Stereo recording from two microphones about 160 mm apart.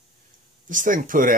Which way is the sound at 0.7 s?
55° right (ahead or behind).